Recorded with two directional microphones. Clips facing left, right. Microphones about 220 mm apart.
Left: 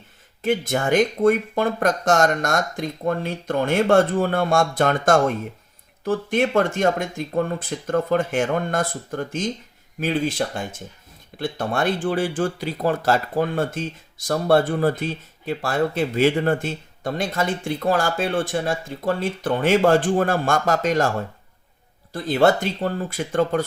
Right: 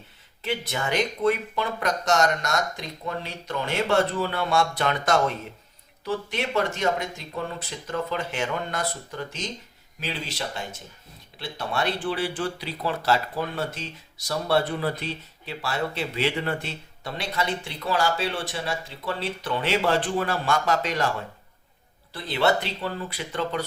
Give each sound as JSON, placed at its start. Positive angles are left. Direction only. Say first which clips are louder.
{"t": 0.4, "sound": "speech", "louder": "left 8 dB", "side_deg": 50}